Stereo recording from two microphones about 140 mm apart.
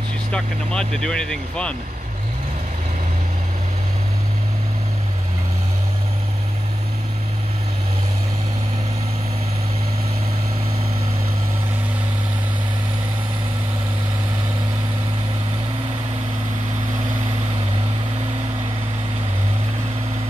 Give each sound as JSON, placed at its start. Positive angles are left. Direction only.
{"t": 0.3, "sound": "speech", "side_deg": 5}